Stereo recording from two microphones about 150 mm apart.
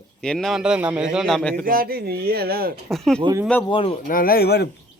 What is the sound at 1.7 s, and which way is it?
Speech, 75° right (ahead or behind).